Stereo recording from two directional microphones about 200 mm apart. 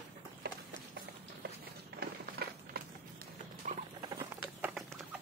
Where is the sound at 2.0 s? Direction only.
50° right (ahead or behind).